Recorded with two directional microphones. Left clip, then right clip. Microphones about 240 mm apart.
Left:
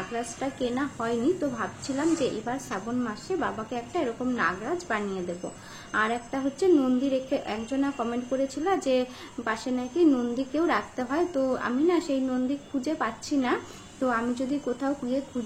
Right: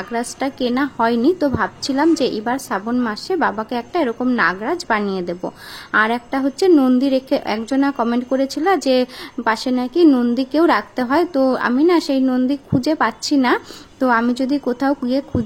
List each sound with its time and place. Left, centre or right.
0.1 s a woman's voice: right